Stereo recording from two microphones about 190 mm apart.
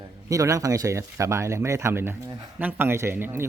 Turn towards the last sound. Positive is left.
turn(degrees=-10)  # may be behind; listen again after turning